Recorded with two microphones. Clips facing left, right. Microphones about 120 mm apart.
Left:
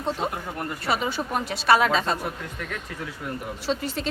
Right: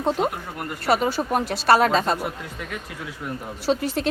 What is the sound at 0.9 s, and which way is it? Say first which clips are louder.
A woman's voice: right 6 dB; 40° right (ahead or behind).